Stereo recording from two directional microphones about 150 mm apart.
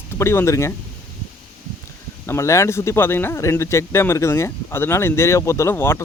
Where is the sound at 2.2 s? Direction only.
20° left (ahead or behind).